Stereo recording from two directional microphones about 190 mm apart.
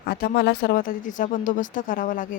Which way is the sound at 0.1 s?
55° left (ahead or behind).